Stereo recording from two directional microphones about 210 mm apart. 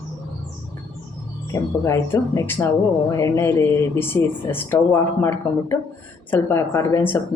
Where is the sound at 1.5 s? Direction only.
15° left (ahead or behind).